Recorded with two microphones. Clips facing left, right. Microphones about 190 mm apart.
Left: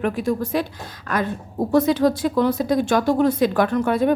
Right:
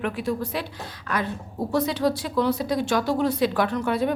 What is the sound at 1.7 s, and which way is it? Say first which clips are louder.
Speech: left 6 dB; 50° left (ahead or behind).